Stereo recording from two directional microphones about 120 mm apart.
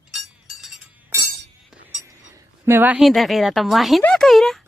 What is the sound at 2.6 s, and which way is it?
Speech, 15° right (ahead or behind).